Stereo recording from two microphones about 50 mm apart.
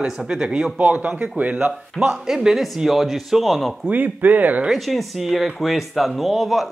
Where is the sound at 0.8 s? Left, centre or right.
Right.